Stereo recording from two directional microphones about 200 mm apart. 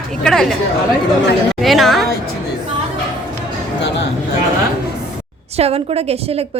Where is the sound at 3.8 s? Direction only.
60° left (ahead or behind).